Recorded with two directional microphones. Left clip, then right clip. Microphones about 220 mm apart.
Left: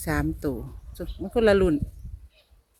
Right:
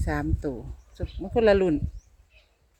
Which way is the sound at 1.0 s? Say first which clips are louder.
Even; 20° left (ahead or behind).